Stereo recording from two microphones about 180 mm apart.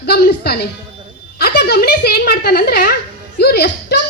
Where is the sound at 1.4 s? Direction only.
60° left (ahead or behind).